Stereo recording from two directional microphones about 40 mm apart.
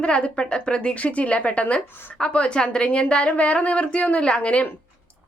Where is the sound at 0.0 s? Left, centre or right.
Left.